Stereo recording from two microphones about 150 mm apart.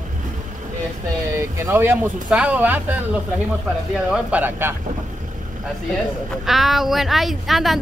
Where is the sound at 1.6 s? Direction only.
15° right (ahead or behind).